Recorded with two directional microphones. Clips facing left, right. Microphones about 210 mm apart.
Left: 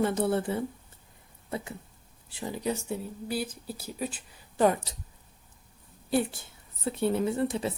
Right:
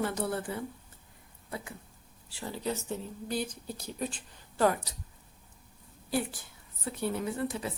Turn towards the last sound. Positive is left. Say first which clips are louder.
# left 5 dB
turn(degrees=25)  # may be behind; listen again after turning